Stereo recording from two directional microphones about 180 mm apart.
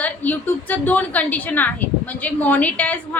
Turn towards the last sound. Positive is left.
turn(degrees=10)  # may be behind; listen again after turning